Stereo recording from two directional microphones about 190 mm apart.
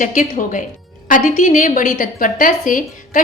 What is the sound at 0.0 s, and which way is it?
A woman's voice, 45° left (ahead or behind).